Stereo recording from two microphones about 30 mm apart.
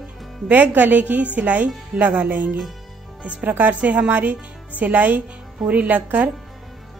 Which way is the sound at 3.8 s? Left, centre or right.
Right.